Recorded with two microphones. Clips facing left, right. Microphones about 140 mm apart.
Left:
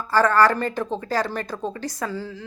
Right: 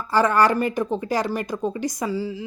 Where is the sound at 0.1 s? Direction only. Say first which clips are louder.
Even; 15° right (ahead or behind).